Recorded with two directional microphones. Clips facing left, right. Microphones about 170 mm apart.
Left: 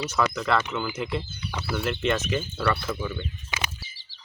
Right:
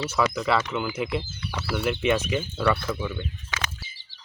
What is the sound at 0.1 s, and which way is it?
Speech, 5° right (ahead or behind).